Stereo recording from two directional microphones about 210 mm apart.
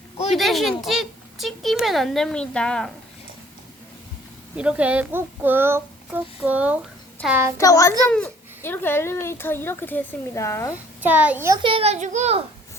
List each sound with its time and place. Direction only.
0.3 s speech: centre (ahead or behind)
4.5 s a child's voice: 5° right (ahead or behind)
7.6 s a child's voice: 15° left (ahead or behind)
11.0 s a child's voice: 10° right (ahead or behind); by 12.4 s 35° right (ahead or behind)